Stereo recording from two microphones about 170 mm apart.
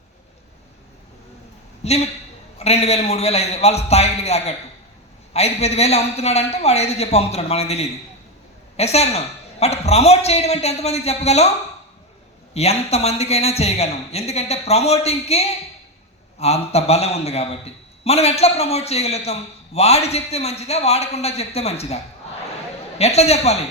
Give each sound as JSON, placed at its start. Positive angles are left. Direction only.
{"t": 1.8, "sound": "a man's voice", "side_deg": 40}
{"t": 12.5, "sound": "a man's voice", "side_deg": 40}